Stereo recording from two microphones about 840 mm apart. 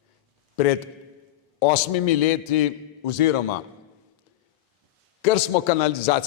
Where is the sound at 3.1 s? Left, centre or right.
Left.